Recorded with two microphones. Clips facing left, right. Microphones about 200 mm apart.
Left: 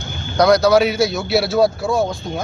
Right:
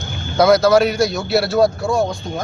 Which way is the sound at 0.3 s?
Centre (ahead or behind).